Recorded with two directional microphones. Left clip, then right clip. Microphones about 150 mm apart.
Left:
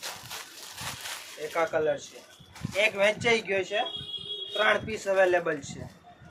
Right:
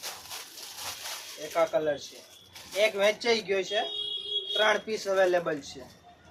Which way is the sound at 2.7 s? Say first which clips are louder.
Even; 5° right (ahead or behind).